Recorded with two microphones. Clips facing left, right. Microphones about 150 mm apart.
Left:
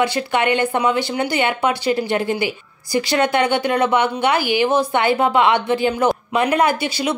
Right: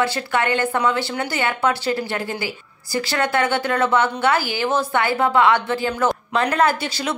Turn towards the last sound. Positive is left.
turn(degrees=15)  # may be behind; listen again after turning